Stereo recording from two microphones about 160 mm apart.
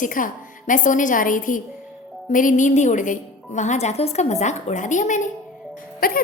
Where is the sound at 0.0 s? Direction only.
55° left (ahead or behind).